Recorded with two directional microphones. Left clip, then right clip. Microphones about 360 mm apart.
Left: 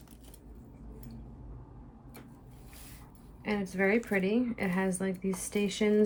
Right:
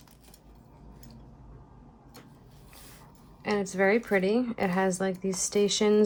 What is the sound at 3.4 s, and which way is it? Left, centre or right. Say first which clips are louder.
A woman's voice: right 5 dB; centre.